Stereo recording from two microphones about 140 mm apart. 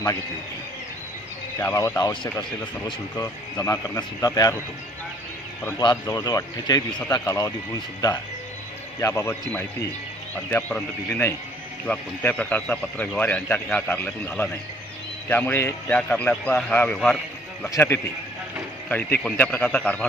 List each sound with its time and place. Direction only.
1.5 s speech: 20° left (ahead or behind)
6.1 s speech: 25° left (ahead or behind); by 17.2 s 10° left (ahead or behind)
17.7 s speech: 20° left (ahead or behind)